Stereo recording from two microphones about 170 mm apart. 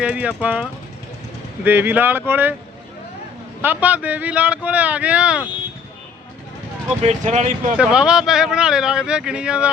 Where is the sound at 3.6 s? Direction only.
10° right (ahead or behind).